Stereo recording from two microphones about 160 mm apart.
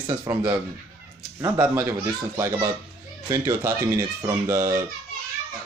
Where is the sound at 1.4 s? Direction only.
15° right (ahead or behind).